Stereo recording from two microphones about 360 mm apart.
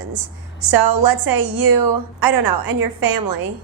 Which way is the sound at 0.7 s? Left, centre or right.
Right.